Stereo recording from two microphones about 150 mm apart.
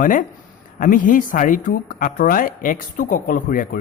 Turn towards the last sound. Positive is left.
turn(degrees=60)  # may be behind; listen again after turning